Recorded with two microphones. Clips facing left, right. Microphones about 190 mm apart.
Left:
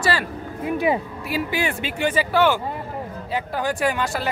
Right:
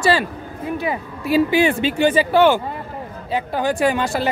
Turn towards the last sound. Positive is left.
turn(degrees=-25)  # may be behind; listen again after turning